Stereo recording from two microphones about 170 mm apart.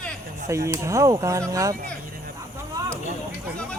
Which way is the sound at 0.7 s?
20° right (ahead or behind).